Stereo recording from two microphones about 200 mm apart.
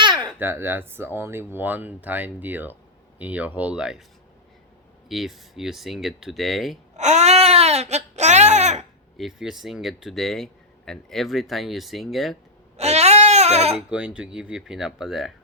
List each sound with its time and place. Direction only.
0.3 s speech: 10° right (ahead or behind)
5.0 s speech: centre (ahead or behind)
6.9 s speech: 35° right (ahead or behind)
9.1 s speech: centre (ahead or behind)
12.7 s goat: 35° right (ahead or behind)
13.7 s speech: 5° right (ahead or behind)